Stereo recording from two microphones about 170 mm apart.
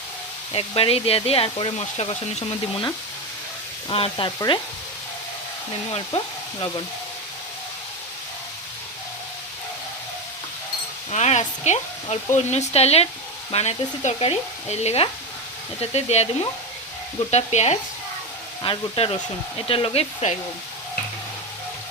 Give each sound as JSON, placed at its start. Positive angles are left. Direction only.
{"t": 0.5, "sound": "speech", "side_deg": 35}
{"t": 4.4, "sound": "stir", "side_deg": 25}
{"t": 6.1, "sound": "speech", "side_deg": 35}
{"t": 11.1, "sound": "speech", "side_deg": 40}
{"t": 18.6, "sound": "speech", "side_deg": 30}